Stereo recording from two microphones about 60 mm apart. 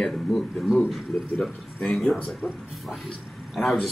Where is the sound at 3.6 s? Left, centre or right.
Centre.